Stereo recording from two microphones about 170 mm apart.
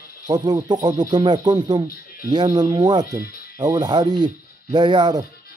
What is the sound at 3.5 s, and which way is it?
Speech, 25° right (ahead or behind).